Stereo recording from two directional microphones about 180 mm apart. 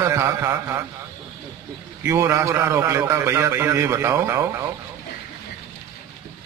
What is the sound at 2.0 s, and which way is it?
A man's voice, 15° right (ahead or behind).